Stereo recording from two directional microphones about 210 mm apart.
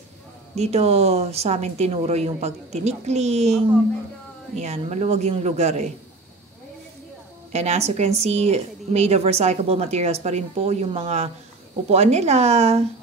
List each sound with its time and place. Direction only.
0.6 s a woman's voice: 30° right (ahead or behind)
7.5 s a woman's voice: 30° right (ahead or behind)